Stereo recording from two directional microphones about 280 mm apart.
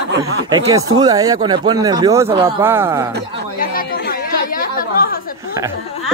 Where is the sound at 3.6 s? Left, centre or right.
Left.